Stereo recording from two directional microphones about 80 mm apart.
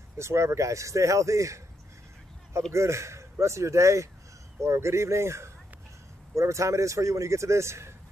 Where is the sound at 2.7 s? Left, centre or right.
Right.